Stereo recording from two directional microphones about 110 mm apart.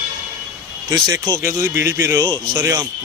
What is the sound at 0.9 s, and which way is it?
Speech, 35° right (ahead or behind).